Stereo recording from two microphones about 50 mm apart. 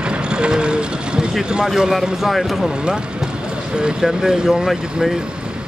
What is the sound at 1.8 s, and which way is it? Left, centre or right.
Speech, centre.